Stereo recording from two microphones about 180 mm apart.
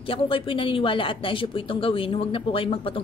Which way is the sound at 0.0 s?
30° left (ahead or behind).